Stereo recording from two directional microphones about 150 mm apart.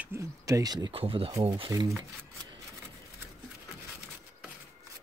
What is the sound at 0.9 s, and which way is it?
Speech, 40° right (ahead or behind).